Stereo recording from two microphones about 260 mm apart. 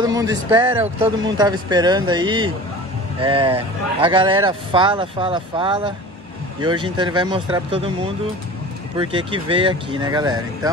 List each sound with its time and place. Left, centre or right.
0.0 s speech: centre